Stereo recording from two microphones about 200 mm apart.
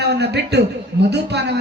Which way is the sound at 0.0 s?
55° right (ahead or behind).